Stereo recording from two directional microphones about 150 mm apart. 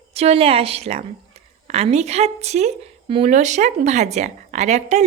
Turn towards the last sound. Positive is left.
turn(degrees=-50)  # may be behind; listen again after turning